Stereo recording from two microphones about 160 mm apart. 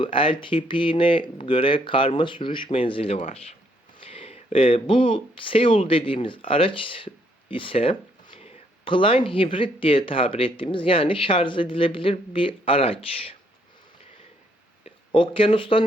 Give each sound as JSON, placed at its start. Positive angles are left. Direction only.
{"t": 0.0, "sound": "speech", "side_deg": 35}
{"t": 14.8, "sound": "speech", "side_deg": 35}